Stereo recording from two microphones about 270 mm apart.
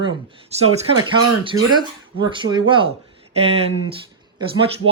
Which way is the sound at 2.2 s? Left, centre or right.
Centre.